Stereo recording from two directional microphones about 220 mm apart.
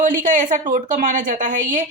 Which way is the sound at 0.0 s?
35° right (ahead or behind).